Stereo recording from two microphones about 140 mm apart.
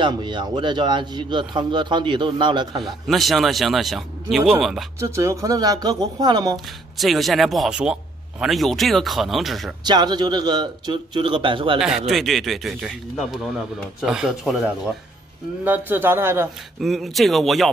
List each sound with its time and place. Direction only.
0.0 s a man's voice: 35° right (ahead or behind)
3.1 s a man's voice: centre (ahead or behind)
5.0 s speech: 20° right (ahead or behind)
7.0 s a man's voice: centre (ahead or behind)
9.8 s a man's voice: 30° right (ahead or behind)
12.1 s a man's voice: centre (ahead or behind)
15.6 s a man's voice: 15° right (ahead or behind)
16.8 s a man's voice: centre (ahead or behind)